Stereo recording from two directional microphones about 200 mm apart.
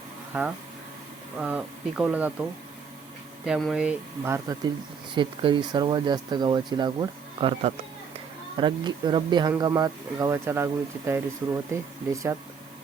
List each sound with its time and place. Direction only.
0.3 s speech: 5° right (ahead or behind)
5.1 s speech: 25° right (ahead or behind)